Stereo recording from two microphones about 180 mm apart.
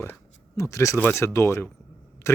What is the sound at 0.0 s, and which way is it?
Speech, 15° left (ahead or behind).